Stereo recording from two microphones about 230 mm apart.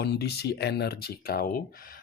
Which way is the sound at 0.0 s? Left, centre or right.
Left.